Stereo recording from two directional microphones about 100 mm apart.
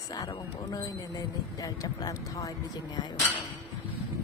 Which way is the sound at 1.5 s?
40° left (ahead or behind).